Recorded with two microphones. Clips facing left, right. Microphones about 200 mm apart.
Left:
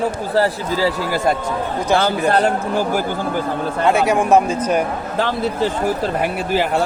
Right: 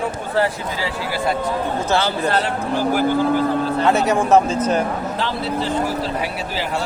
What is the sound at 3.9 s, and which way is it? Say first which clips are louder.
Speech: left 1 dB; 10° left (ahead or behind).